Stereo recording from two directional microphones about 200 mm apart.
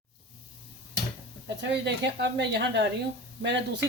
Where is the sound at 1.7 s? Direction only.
60° right (ahead or behind).